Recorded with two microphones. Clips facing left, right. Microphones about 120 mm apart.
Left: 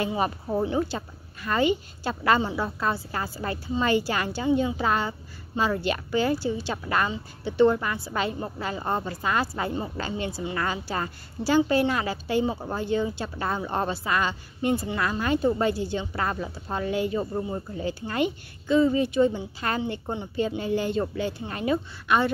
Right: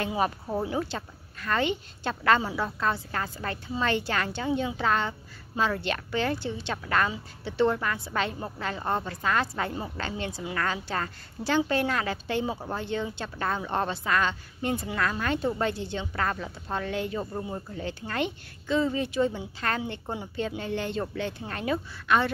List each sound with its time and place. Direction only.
0.1 s a woman's voice: centre (ahead or behind)
17.6 s a woman's voice: 10° left (ahead or behind)